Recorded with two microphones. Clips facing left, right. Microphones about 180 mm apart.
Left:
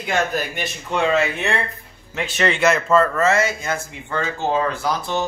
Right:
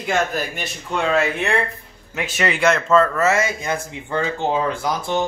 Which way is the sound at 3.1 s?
10° right (ahead or behind).